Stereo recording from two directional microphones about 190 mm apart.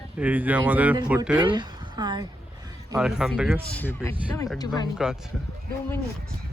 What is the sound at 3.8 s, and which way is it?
Speech, 10° left (ahead or behind).